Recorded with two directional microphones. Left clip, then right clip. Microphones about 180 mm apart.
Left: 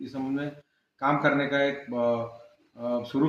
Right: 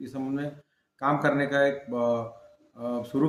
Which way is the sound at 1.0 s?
20° right (ahead or behind).